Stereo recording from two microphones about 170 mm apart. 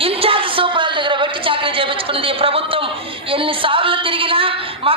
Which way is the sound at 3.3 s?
30° right (ahead or behind).